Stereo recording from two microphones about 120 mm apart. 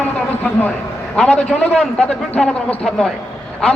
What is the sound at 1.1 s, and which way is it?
A man's voice, 5° left (ahead or behind).